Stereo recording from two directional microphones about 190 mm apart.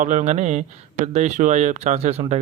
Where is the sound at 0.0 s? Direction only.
40° right (ahead or behind).